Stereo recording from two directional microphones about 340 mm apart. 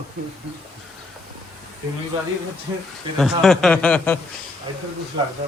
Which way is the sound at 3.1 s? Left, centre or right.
Centre.